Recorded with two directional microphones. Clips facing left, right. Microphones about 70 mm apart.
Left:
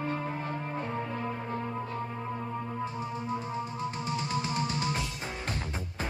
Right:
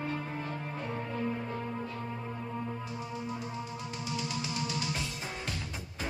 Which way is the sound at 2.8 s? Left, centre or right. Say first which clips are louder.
Left 4 dB; left.